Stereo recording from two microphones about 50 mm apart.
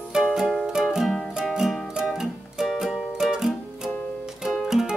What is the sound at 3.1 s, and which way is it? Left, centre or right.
Music, centre.